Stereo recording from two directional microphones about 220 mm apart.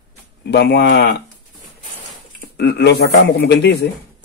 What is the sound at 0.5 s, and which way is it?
Speech, 50° left (ahead or behind).